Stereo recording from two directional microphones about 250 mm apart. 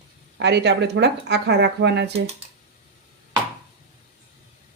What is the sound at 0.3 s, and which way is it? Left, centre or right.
Speech, right.